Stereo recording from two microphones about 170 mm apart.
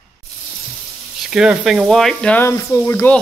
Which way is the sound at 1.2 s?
5° right (ahead or behind).